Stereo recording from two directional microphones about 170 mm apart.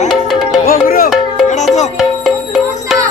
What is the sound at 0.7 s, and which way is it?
Music, 60° left (ahead or behind).